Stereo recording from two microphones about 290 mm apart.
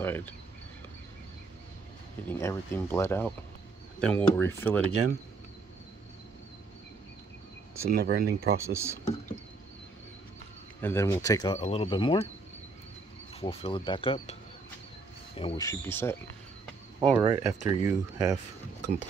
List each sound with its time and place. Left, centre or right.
0.0 s a sound: centre
2.2 s speech: centre
7.9 s speech: right
8.5 s speech: centre
10.8 s speech: centre
13.4 s speech: centre
15.3 s speech: centre
17.1 s speech: centre